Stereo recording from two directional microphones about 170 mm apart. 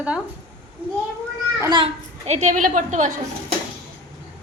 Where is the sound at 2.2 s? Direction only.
40° right (ahead or behind).